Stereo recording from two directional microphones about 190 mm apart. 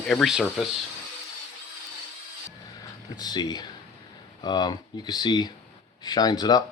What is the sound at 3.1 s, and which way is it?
Speech, 20° left (ahead or behind).